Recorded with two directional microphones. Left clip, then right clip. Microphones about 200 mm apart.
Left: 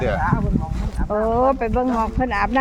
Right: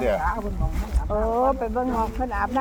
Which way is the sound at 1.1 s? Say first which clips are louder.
Left 4 dB; 35° left (ahead or behind).